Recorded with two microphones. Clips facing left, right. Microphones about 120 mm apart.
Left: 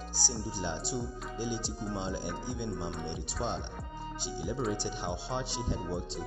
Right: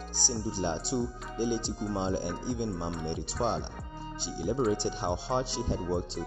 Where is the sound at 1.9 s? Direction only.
25° right (ahead or behind).